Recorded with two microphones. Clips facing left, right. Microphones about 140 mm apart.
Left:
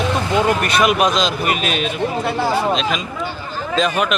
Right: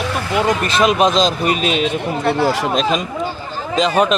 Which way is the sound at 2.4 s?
90° right.